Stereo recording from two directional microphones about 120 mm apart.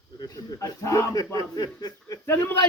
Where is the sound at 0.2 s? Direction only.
30° left (ahead or behind).